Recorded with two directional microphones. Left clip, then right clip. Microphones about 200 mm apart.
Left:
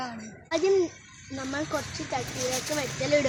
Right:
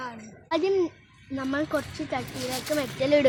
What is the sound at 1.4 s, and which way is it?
Speech, 35° right (ahead or behind).